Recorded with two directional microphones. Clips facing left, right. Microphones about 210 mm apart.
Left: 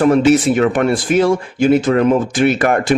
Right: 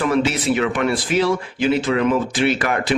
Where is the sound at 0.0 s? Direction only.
45° left (ahead or behind).